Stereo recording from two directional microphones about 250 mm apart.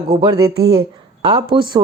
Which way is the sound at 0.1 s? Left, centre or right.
Centre.